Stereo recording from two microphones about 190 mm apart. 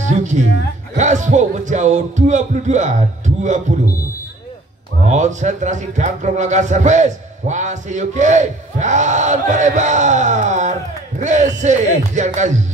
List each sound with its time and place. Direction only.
0.9 s a man's voice: 40° right (ahead or behind)
5.0 s a man's voice: 40° right (ahead or behind)